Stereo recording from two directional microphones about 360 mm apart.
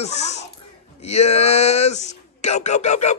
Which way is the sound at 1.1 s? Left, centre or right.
Centre.